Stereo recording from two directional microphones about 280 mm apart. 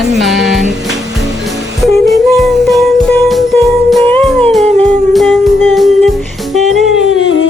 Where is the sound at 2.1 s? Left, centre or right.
Centre.